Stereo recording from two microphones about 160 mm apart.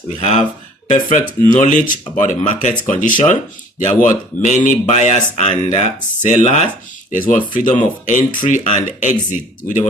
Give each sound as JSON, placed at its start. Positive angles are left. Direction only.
{"t": 0.2, "sound": "speech", "side_deg": 45}
{"t": 4.4, "sound": "speech", "side_deg": 50}
{"t": 7.1, "sound": "speech", "side_deg": 55}